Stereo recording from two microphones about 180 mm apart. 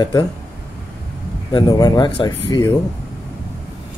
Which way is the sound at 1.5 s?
25° left (ahead or behind).